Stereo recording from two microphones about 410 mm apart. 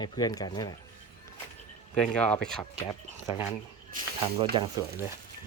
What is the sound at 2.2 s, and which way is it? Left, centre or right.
Speech, centre.